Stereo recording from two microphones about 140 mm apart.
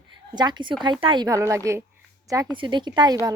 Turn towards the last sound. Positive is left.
turn(degrees=-25)  # may be behind; listen again after turning